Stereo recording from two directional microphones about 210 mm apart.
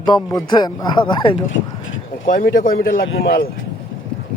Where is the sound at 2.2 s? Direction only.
40° left (ahead or behind).